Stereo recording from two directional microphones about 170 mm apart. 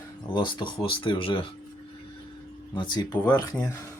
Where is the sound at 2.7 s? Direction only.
30° left (ahead or behind).